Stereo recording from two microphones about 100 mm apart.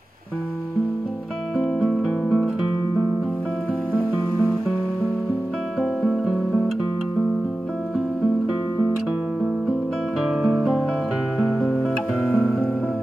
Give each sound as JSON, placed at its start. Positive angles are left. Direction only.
{"t": 1.6, "sound": "music", "side_deg": 0}
{"t": 5.8, "sound": "music", "side_deg": 5}
{"t": 10.2, "sound": "guitar", "side_deg": 0}
{"t": 11.5, "sound": "music", "side_deg": 5}